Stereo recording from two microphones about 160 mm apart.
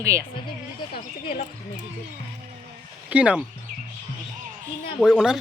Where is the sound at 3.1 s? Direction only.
10° right (ahead or behind).